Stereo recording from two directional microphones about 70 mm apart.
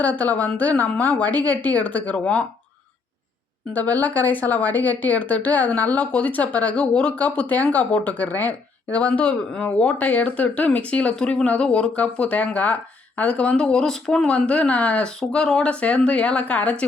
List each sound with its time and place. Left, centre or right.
0.0 s speech: left
3.7 s a woman's voice: left